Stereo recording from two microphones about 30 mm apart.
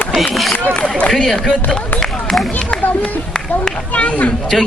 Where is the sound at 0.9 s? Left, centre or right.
Left.